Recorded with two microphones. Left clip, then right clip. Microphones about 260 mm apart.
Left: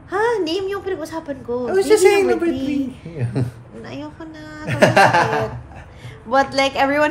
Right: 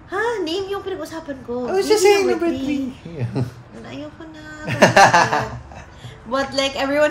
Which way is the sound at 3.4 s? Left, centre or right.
Centre.